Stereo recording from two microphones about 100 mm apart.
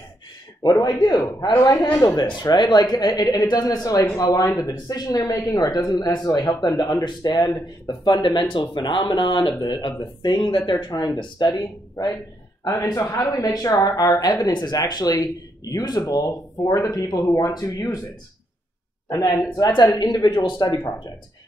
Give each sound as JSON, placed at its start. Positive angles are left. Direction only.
{"t": 0.6, "sound": "speech", "side_deg": 25}
{"t": 0.8, "sound": "speech", "side_deg": 45}
{"t": 2.1, "sound": "speech", "side_deg": 50}
{"t": 10.9, "sound": "speech", "side_deg": 35}
{"t": 19.0, "sound": "speech", "side_deg": 40}